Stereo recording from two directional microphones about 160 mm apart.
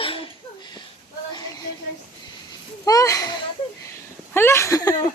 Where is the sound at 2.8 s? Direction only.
20° left (ahead or behind).